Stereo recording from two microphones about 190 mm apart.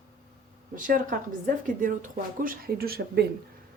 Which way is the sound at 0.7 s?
45° right (ahead or behind).